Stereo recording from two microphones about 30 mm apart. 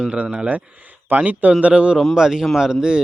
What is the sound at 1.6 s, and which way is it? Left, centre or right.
Speech, right.